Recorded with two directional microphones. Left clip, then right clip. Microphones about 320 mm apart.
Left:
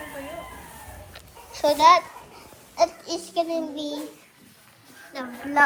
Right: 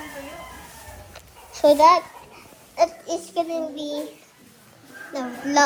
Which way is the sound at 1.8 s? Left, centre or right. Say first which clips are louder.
Left 1 dB; left.